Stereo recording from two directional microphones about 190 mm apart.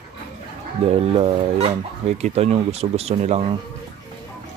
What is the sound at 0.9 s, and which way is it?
Speech, 30° right (ahead or behind).